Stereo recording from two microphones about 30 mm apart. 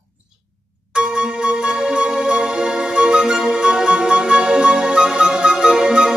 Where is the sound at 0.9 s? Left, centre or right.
Right.